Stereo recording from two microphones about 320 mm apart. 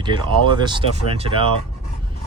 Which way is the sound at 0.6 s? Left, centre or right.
Centre.